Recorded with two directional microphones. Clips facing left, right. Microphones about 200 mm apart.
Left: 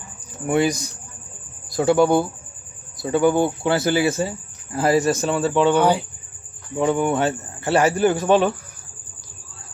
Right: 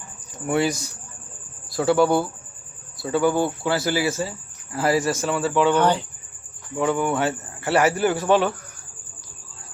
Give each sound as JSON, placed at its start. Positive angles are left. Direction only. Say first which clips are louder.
{"t": 0.4, "sound": "speech", "louder": "left 3 dB", "side_deg": 20}
{"t": 5.7, "sound": "speech", "louder": "left 2 dB", "side_deg": 10}
{"t": 6.7, "sound": "speech", "louder": "left 2 dB", "side_deg": 20}